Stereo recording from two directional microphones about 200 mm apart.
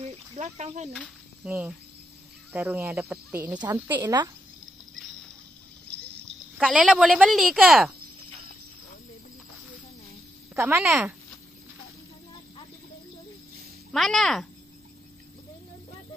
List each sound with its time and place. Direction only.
0.0 s snake: 35° right (ahead or behind)
0.9 s speech: 5° right (ahead or behind)
6.6 s speech: 5° right (ahead or behind)
10.6 s speech: 10° right (ahead or behind)
13.9 s speech: centre (ahead or behind)